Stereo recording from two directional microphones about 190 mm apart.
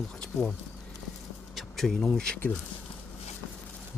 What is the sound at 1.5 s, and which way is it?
Speech, centre (ahead or behind).